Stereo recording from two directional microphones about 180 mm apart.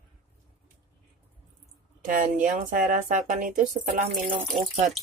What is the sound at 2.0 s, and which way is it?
Speech, 50° right (ahead or behind).